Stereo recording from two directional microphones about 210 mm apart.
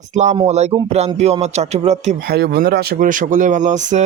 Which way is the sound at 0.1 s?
35° right (ahead or behind).